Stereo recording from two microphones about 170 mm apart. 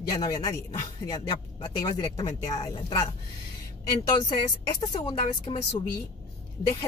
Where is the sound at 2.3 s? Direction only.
35° left (ahead or behind).